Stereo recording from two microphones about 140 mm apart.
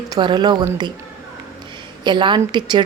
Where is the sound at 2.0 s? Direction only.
35° right (ahead or behind).